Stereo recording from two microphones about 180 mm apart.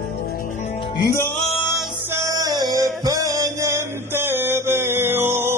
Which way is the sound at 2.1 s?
15° right (ahead or behind).